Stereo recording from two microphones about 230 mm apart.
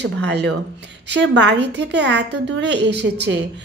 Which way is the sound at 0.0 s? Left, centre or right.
Right.